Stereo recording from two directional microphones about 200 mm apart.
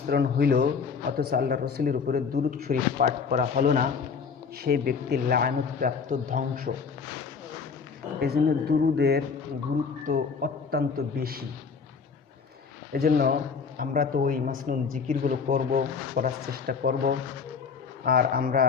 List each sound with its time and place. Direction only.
0.1 s speech: 55° right (ahead or behind)
8.2 s speech: 50° right (ahead or behind)
12.9 s speech: 50° right (ahead or behind)